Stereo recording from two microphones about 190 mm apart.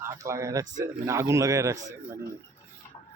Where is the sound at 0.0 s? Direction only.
15° right (ahead or behind).